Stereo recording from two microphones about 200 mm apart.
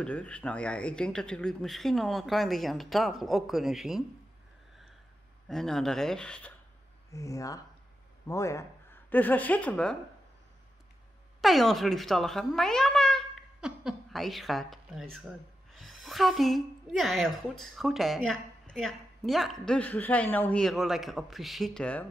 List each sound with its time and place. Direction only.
0.0 s a woman's voice: 5° left (ahead or behind)
5.5 s a woman's voice: centre (ahead or behind)
7.1 s a woman's voice: 15° left (ahead or behind)
11.4 s a woman's voice: centre (ahead or behind)